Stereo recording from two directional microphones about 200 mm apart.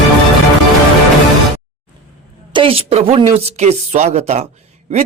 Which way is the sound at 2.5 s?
25° right (ahead or behind).